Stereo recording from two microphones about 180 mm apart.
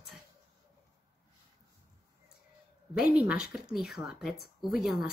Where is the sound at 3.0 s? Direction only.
5° right (ahead or behind).